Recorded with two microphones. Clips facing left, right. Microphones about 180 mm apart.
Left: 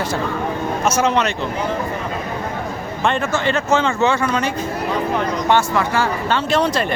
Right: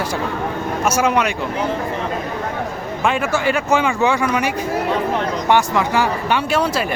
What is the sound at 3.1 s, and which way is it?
Speech, 10° right (ahead or behind).